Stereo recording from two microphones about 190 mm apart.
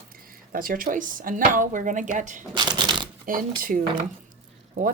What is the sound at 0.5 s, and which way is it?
Speech, 45° right (ahead or behind).